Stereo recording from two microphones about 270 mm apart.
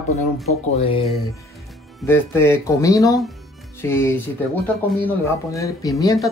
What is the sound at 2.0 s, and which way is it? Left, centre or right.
Speech, centre.